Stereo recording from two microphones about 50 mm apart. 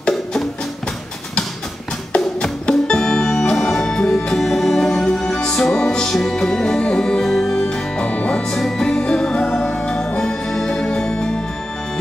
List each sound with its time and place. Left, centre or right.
0.1 s music: centre
2.6 s organ: centre
3.5 s music: centre
7.2 s music: centre
7.6 s music: left
8.5 s music: centre